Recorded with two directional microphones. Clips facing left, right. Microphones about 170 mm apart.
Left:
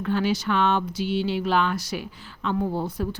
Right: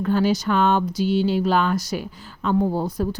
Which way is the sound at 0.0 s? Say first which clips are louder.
Right 4 dB; 40° right (ahead or behind).